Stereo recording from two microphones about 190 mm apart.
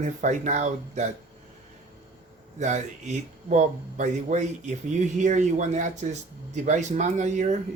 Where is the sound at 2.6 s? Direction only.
40° right (ahead or behind).